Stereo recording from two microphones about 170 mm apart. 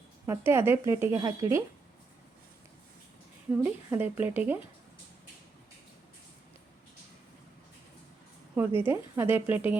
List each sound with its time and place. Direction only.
0.3 s speech: 15° right (ahead or behind)
3.5 s speech: 15° right (ahead or behind)
8.6 s speech: 10° right (ahead or behind)